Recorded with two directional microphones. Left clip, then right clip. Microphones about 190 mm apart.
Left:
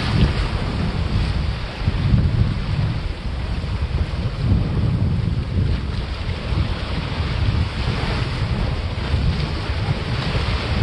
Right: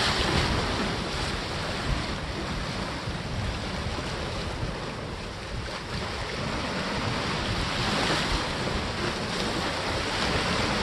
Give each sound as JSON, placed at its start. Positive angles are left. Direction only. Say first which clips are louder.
{"t": 0.0, "sound": "boat", "louder": "even", "side_deg": -40}